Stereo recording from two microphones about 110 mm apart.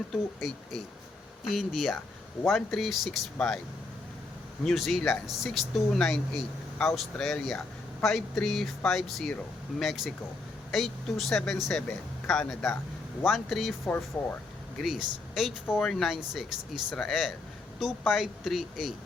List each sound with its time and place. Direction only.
0.1 s speech: centre (ahead or behind)
4.6 s speech: centre (ahead or behind)
13.8 s speech: 15° left (ahead or behind)
14.8 s speech: centre (ahead or behind)